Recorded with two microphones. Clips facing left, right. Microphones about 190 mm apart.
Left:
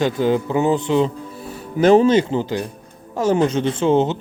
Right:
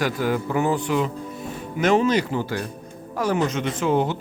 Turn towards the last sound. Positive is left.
turn(degrees=25)  # may be behind; listen again after turning